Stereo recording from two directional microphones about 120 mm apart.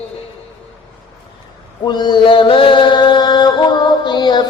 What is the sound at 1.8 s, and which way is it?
Mantra, 40° left (ahead or behind).